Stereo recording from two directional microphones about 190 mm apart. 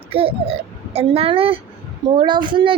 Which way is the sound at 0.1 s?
30° right (ahead or behind).